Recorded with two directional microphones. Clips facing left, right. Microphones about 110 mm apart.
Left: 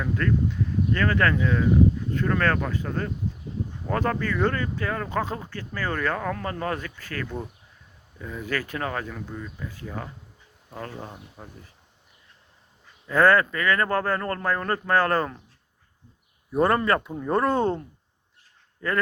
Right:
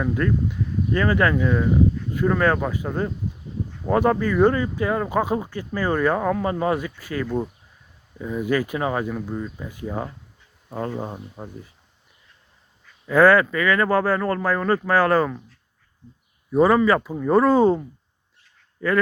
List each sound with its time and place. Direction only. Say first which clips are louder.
0.0 s speech: right 2 dB; 15° right (ahead or behind)
13.1 s speech: right 4 dB; 10° right (ahead or behind)
16.5 s speech: right 5 dB; centre (ahead or behind)